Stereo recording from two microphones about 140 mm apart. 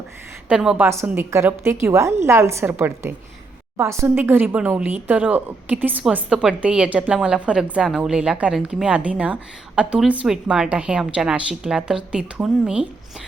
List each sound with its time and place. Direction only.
0.4 s speech: 5° right (ahead or behind)
0.9 s a woman's voice: 15° right (ahead or behind)